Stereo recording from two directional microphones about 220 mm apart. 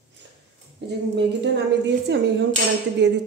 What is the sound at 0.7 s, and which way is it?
Speech, 50° right (ahead or behind).